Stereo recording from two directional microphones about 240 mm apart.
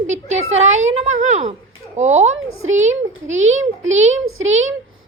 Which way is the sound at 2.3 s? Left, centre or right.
Right.